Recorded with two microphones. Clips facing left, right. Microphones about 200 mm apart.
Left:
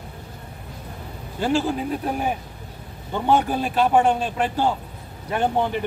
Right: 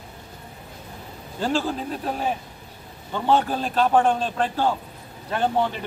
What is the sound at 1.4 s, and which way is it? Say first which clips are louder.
A man's voice: left 3 dB; 10° left (ahead or behind).